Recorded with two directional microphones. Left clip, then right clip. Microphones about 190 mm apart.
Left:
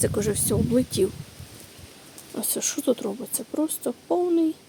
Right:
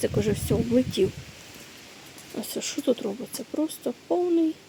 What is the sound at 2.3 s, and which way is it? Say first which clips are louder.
Speech: left 3 dB; centre (ahead or behind).